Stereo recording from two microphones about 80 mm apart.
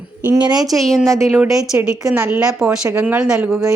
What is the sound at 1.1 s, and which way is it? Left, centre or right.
Speech, right.